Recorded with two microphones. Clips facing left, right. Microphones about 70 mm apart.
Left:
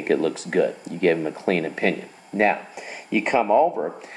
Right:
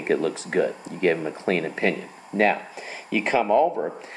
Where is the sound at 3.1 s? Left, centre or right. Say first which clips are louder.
Left 2 dB; centre.